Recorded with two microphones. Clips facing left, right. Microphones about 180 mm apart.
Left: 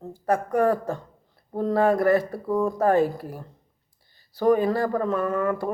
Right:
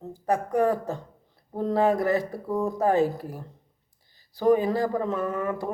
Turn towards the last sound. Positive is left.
turn(degrees=-20)  # may be behind; listen again after turning